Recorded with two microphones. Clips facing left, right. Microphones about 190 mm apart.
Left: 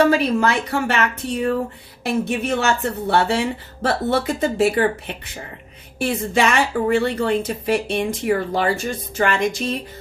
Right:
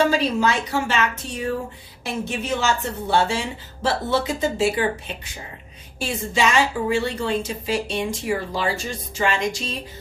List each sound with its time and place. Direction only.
0.0 s a woman's voice: 60° left (ahead or behind)